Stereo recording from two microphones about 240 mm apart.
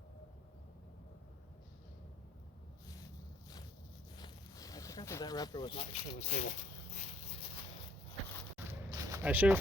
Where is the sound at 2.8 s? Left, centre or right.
Centre.